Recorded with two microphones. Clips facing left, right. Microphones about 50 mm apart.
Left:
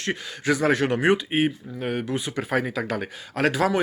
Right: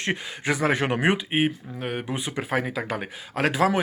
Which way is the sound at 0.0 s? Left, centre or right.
Right.